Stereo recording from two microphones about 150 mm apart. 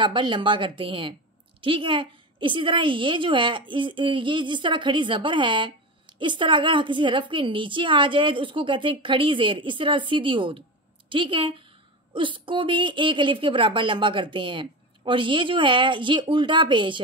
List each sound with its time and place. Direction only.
0.0 s a woman's voice: 30° right (ahead or behind)